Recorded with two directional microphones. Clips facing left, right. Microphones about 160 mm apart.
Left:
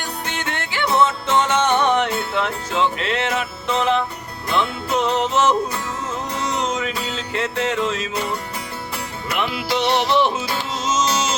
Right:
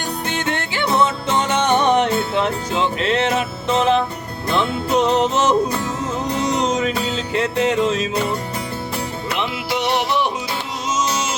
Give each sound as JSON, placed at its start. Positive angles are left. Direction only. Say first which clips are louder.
{"t": 0.3, "sound": "music", "louder": "right 5 dB", "side_deg": -20}
{"t": 9.3, "sound": "music", "louder": "left 2 dB", "side_deg": -20}